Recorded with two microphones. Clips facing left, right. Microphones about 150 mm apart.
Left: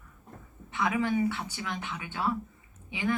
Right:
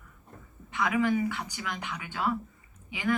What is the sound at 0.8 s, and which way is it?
Speech, 25° left (ahead or behind).